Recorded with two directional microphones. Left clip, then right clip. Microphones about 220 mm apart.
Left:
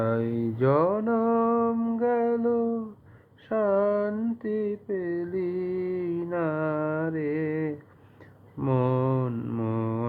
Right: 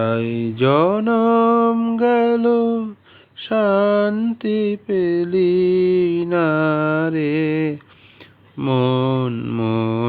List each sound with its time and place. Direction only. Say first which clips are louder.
0.0 s mantra: right 7 dB; 50° right (ahead or behind)
0.9 s mantra: right 8 dB; 40° right (ahead or behind)
2.4 s a sound: right 9 dB; 35° right (ahead or behind)
3.5 s mantra: right 8 dB; 40° right (ahead or behind)
5.4 s mantra: right 17 dB; 10° right (ahead or behind)
6.1 s mantra: right 10 dB; 45° right (ahead or behind)
8.5 s mantra: right 7 dB; 30° right (ahead or behind)